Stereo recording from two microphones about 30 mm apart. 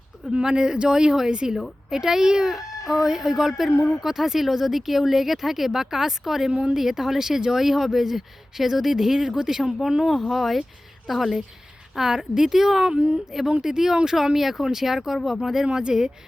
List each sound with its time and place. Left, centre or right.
0.4 s speech: right
1.9 s speech: centre
2.5 s baby cry: centre
3.1 s speech: centre
6.5 s a woman's voice: right
6.7 s speech: centre
10.2 s a woman's voice: centre
11.9 s speech: centre
15.7 s speech: right